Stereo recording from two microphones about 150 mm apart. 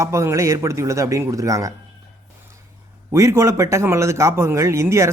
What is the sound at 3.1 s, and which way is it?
A man's voice, 20° right (ahead or behind).